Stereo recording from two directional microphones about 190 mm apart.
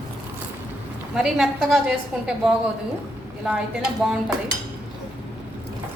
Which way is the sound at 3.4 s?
5° right (ahead or behind).